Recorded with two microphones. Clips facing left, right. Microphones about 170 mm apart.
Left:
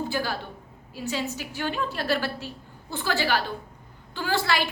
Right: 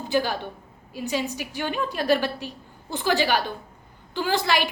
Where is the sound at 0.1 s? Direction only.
15° right (ahead or behind).